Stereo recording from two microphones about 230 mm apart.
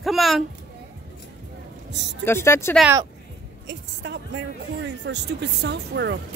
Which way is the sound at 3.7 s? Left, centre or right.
Right.